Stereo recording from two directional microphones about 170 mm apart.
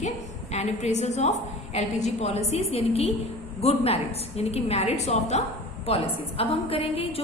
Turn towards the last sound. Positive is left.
turn(degrees=35)  # may be behind; listen again after turning